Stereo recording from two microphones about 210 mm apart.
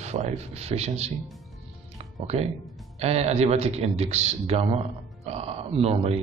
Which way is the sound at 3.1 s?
30° right (ahead or behind).